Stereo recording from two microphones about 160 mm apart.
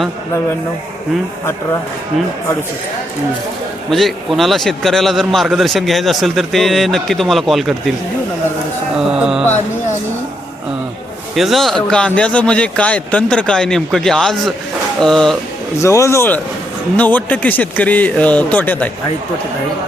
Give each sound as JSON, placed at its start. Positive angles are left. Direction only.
{"t": 3.8, "sound": "a man's voice", "side_deg": 0}
{"t": 9.0, "sound": "a man's voice", "side_deg": -5}
{"t": 11.3, "sound": "a man's voice", "side_deg": 0}
{"t": 15.8, "sound": "speech", "side_deg": 20}